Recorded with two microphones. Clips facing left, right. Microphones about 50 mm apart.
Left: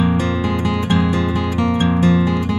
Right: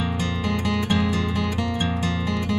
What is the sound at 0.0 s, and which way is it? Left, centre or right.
Music, left.